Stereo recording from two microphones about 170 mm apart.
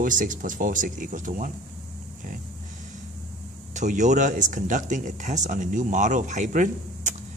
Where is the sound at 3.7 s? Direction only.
45° right (ahead or behind).